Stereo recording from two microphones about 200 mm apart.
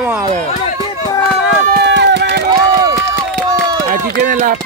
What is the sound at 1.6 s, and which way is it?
Run, 55° right (ahead or behind).